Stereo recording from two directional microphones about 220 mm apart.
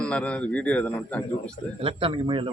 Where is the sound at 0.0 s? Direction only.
5° left (ahead or behind).